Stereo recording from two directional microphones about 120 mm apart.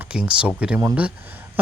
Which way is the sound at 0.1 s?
10° right (ahead or behind).